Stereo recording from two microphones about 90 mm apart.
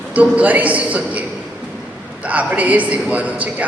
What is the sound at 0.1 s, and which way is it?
A man's voice, 15° right (ahead or behind).